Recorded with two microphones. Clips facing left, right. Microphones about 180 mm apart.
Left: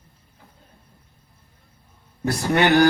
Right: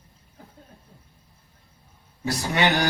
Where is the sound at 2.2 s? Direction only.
55° left (ahead or behind).